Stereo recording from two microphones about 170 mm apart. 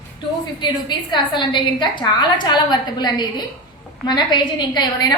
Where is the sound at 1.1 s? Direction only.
25° left (ahead or behind).